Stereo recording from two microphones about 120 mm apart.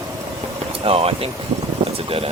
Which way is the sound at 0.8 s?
55° right (ahead or behind).